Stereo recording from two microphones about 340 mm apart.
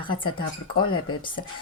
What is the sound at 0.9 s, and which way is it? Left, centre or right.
Speech, left.